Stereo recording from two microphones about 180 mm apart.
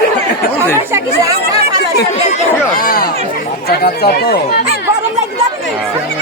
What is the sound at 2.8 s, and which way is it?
Chatter, 50° left (ahead or behind).